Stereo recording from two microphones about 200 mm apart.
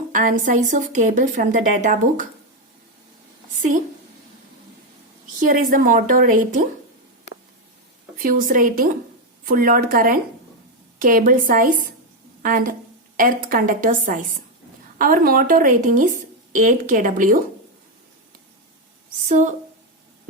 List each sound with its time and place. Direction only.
0.1 s a woman's voice: 40° right (ahead or behind)
5.5 s a woman's voice: 45° right (ahead or behind)
8.2 s a woman's voice: 45° right (ahead or behind)
19.3 s a woman's voice: 40° right (ahead or behind)